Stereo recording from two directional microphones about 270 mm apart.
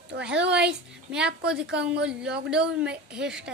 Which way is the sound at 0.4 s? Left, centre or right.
Centre.